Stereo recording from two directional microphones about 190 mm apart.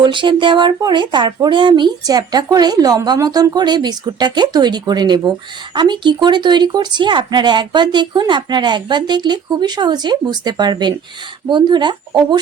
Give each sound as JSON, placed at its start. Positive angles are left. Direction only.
{"t": 0.0, "sound": "speech", "side_deg": -25}